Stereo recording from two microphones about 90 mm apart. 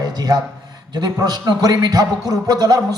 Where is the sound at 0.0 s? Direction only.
45° right (ahead or behind).